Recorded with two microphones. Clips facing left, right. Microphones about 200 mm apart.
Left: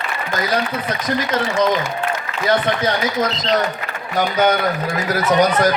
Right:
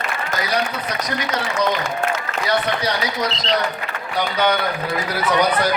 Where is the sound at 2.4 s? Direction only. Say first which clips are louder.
Left 4 dB; 50° left (ahead or behind).